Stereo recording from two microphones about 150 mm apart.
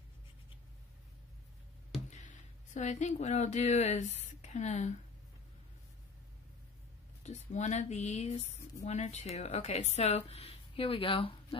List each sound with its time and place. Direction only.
2.0 s speech: 55° left (ahead or behind)
7.2 s speech: 50° left (ahead or behind)